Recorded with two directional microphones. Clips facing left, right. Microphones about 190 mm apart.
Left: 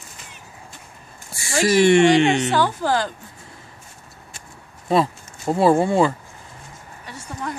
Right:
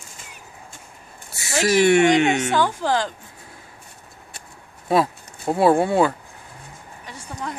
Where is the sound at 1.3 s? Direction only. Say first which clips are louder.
Left 1 dB; 5° right (ahead or behind).